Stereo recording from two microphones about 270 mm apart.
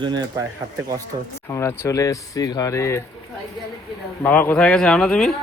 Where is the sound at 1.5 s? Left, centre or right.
Centre.